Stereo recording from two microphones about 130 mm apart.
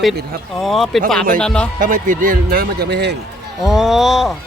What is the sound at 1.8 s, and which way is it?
Speech, 90° right.